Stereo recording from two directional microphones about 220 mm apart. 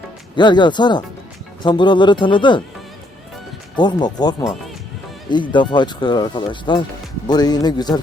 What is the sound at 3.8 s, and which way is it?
Speech, 20° left (ahead or behind).